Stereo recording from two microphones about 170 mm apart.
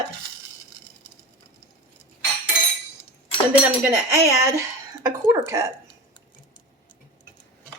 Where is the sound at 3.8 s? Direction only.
15° right (ahead or behind).